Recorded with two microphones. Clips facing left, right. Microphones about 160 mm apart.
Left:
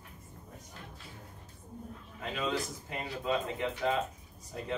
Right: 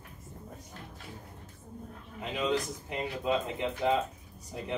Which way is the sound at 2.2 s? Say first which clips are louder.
Right 3 dB; 20° right (ahead or behind).